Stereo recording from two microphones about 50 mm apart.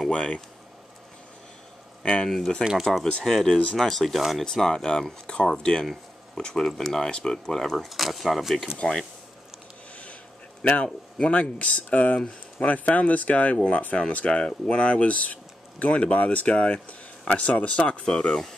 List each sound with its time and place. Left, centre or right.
0.1 s speech: left
2.2 s speech: centre
4.5 s speech: centre
10.7 s speech: left
12.2 s speech: centre
12.7 s speech: left
18.0 s speech: centre